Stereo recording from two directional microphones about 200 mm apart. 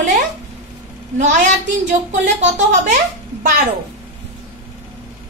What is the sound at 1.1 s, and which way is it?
Speech, 35° right (ahead or behind).